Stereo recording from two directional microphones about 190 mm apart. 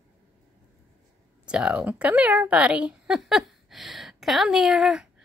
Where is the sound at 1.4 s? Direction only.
5° right (ahead or behind).